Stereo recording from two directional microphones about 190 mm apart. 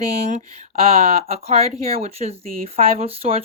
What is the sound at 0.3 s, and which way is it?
Speech, 35° right (ahead or behind).